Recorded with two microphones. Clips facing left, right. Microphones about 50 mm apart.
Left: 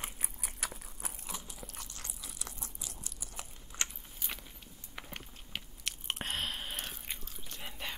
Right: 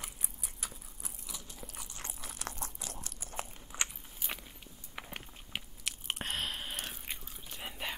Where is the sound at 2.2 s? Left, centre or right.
Right.